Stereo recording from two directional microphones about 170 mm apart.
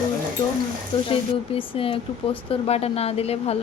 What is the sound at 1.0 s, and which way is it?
Speech, 35° left (ahead or behind).